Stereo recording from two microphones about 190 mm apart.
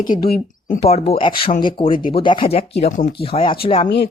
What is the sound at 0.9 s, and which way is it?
Speech, 30° left (ahead or behind).